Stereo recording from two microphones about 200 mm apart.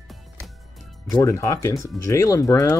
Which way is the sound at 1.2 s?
15° left (ahead or behind).